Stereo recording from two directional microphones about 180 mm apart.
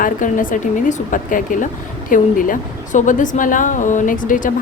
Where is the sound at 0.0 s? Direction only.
45° left (ahead or behind).